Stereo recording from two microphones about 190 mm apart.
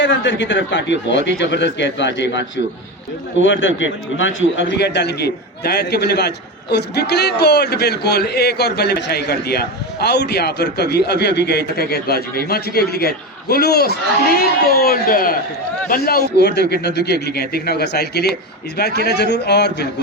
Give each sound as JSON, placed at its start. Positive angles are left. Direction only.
{"t": 0.0, "sound": "speech", "side_deg": 70}
{"t": 3.4, "sound": "a man's voice", "side_deg": 80}